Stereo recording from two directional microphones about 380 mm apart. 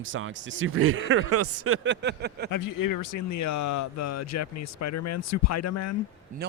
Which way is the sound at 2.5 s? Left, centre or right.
Left.